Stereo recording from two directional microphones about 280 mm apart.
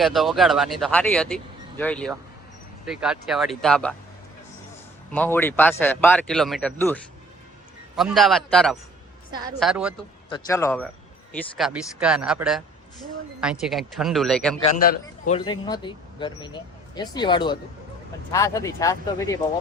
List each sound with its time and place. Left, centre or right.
0.0 s speech: centre
5.1 s speech: centre
10.2 s speech: centre
15.3 s speech: centre